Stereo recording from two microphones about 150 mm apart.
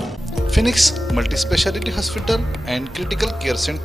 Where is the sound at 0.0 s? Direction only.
Centre (ahead or behind).